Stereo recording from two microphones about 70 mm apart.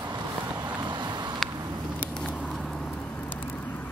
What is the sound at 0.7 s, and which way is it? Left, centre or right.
Vehicle, right.